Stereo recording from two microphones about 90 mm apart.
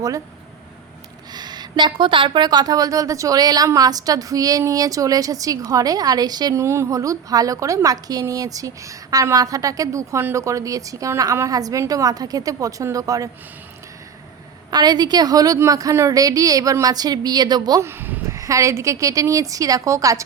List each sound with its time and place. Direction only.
1.3 s a woman's voice: 50° right (ahead or behind)
14.7 s a woman's voice: 50° right (ahead or behind)
17.8 s a sound: 25° right (ahead or behind)
18.3 s a woman's voice: 35° right (ahead or behind)